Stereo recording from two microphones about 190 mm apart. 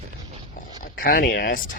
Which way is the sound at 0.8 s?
50° left (ahead or behind).